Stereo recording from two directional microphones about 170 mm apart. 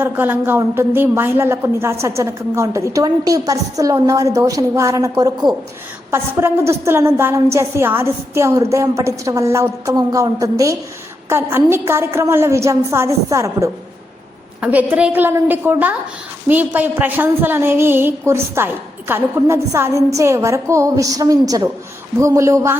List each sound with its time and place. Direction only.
0.0 s a woman's voice: 10° right (ahead or behind)